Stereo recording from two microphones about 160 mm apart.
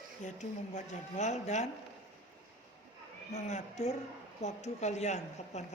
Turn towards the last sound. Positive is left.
turn(degrees=45)  # may be behind; listen again after turning